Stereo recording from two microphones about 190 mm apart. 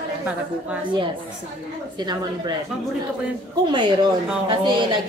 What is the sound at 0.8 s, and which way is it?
A woman's voice, 25° right (ahead or behind).